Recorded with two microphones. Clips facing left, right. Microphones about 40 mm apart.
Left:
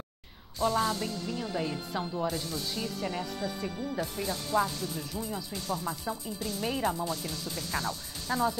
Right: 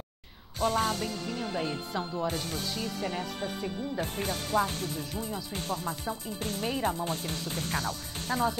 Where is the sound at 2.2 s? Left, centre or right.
Right.